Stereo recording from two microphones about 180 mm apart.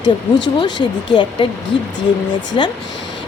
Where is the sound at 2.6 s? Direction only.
30° left (ahead or behind).